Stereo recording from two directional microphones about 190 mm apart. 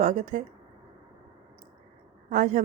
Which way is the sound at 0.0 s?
40° right (ahead or behind).